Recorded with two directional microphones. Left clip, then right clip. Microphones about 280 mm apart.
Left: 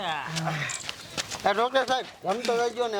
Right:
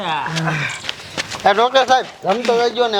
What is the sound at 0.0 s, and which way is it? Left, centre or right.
A man's voice, centre.